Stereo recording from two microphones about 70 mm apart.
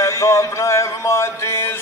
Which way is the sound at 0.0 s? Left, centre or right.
Left.